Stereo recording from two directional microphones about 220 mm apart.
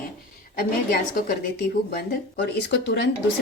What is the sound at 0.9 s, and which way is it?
Speech, 45° left (ahead or behind).